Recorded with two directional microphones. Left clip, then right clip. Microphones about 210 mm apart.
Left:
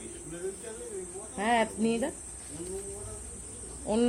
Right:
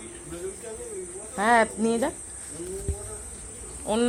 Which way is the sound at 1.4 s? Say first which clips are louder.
Right 7 dB; 45° right (ahead or behind).